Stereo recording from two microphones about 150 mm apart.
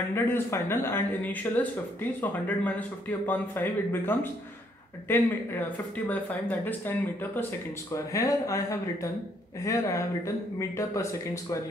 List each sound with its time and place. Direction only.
0.1 s speech: 15° left (ahead or behind)